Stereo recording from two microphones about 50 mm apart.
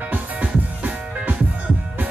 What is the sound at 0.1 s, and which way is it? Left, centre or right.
Music, right.